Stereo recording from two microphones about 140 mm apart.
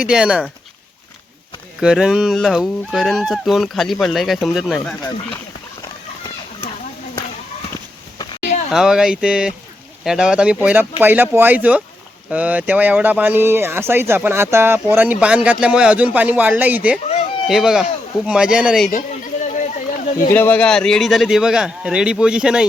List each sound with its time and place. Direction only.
0.0 s speech: 5° right (ahead or behind)
1.8 s speech: 5° right (ahead or behind)
4.8 s speech: 10° left (ahead or behind)
8.7 s speech: 5° right (ahead or behind)
17.1 s a sound: 50° left (ahead or behind)
17.5 s speech: centre (ahead or behind)
18.9 s a sound: 65° left (ahead or behind)
20.3 s speech: 15° left (ahead or behind); by 22.6 s 5° right (ahead or behind)